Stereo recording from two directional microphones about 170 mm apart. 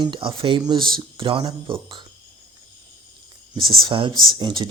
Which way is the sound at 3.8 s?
30° right (ahead or behind).